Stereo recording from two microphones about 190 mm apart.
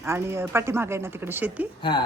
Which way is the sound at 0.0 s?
15° right (ahead or behind).